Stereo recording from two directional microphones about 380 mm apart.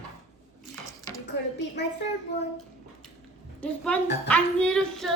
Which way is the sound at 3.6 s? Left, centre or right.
Centre.